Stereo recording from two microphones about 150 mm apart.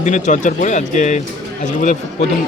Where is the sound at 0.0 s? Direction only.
55° left (ahead or behind).